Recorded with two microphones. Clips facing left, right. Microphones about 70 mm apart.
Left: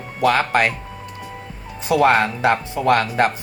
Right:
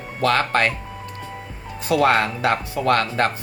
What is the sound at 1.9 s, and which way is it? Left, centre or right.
Speech, left.